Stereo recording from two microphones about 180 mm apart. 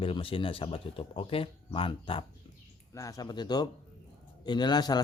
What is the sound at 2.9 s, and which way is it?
Speech, 20° left (ahead or behind).